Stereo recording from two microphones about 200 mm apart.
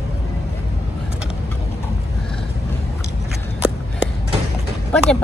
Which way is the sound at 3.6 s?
5° right (ahead or behind).